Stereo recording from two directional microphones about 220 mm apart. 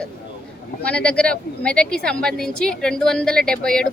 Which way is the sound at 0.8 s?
5° left (ahead or behind).